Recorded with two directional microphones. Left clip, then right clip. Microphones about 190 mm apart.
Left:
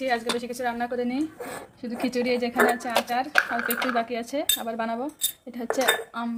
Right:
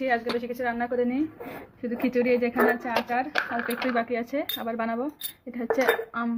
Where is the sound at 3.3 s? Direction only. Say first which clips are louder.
Left 4 dB; 20° left (ahead or behind).